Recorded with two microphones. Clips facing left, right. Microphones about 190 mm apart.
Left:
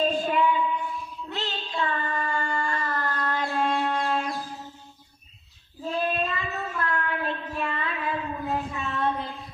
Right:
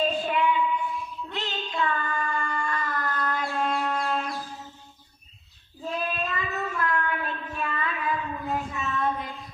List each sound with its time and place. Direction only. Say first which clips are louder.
0.0 s a sound: left 2 dB; 45° left (ahead or behind)
1.4 s child singing: right 1 dB; 35° left (ahead or behind)
5.9 s child singing: left 3 dB; 30° left (ahead or behind)